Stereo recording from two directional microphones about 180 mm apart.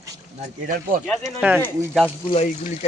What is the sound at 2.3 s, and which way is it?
Speech, 40° left (ahead or behind).